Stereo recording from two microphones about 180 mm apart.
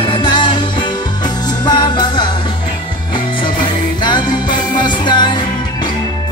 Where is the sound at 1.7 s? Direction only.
25° left (ahead or behind).